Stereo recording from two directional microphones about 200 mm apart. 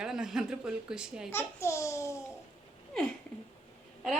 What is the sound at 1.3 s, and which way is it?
Speech, 15° left (ahead or behind).